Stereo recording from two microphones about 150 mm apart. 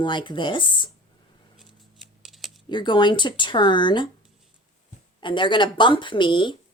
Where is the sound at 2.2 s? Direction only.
Centre (ahead or behind).